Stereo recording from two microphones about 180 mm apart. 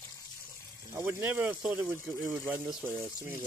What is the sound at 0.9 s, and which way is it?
Speech, 10° right (ahead or behind).